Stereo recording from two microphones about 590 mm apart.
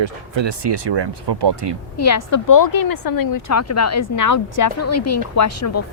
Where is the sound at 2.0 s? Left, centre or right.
Left.